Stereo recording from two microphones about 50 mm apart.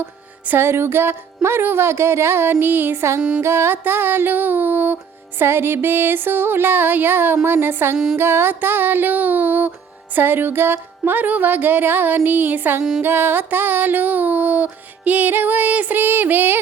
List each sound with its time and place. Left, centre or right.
0.0 s speech: right
3.2 s music: centre
3.4 s speech: right
5.4 s speech: right
8.2 s music: right